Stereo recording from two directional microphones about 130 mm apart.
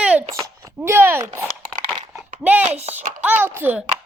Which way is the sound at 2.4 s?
10° right (ahead or behind).